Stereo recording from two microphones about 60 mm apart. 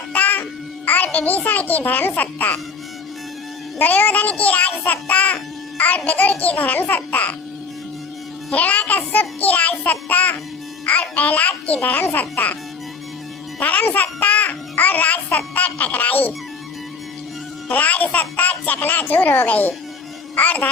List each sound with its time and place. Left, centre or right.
0.1 s music: left
0.9 s a child's voice: left
3.8 s a child's voice: left
8.5 s a child's voice: left
13.6 s a child's voice: left
17.7 s a child's voice: left